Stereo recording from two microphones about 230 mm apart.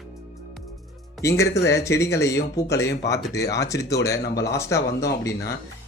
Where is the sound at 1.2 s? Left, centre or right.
Centre.